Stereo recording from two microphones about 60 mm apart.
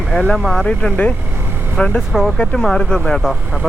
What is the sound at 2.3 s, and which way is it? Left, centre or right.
Speech, centre.